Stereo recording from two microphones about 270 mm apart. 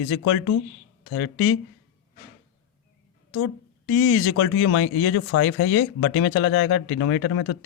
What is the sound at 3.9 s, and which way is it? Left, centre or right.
Speech, left.